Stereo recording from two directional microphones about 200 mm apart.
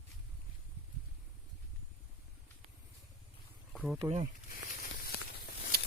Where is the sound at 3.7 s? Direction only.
5° right (ahead or behind).